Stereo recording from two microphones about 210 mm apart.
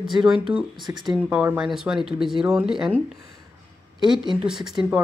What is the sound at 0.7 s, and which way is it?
Speech, 20° right (ahead or behind).